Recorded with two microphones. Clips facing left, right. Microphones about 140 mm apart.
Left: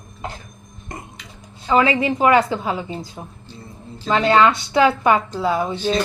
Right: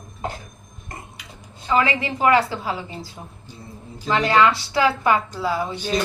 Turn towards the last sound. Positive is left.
turn(degrees=20)  # may be behind; listen again after turning